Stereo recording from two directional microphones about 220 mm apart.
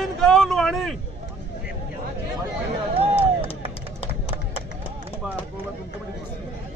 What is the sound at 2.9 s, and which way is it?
Chop, 25° right (ahead or behind).